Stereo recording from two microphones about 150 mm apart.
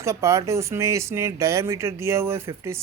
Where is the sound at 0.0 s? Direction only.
20° right (ahead or behind).